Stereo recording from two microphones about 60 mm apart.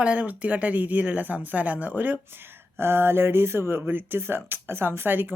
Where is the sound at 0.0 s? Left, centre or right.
Right.